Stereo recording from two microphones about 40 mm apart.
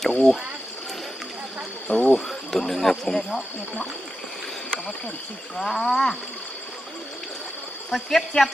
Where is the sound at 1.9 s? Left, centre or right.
Left.